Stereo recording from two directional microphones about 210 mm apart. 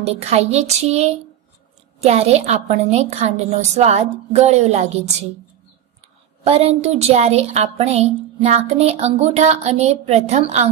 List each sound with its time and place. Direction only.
0.0 s a woman's voice: 30° right (ahead or behind)
6.4 s a woman's voice: 30° right (ahead or behind)